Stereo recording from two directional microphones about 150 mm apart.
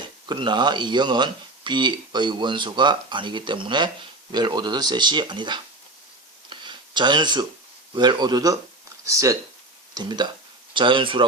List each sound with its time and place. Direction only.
0.0 s speech: 30° right (ahead or behind)
6.5 s a sound: 30° right (ahead or behind)
7.9 s speech: 30° right (ahead or behind)